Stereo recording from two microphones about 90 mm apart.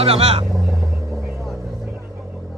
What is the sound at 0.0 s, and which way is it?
Speech, 90° right.